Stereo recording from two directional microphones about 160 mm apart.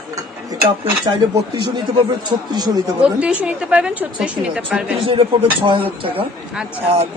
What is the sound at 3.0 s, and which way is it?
A woman's voice, 5° right (ahead or behind).